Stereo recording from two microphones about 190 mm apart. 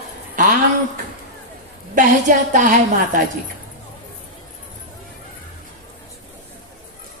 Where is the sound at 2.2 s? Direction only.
45° right (ahead or behind).